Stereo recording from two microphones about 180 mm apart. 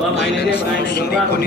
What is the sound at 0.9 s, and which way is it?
Speech, 60° left (ahead or behind).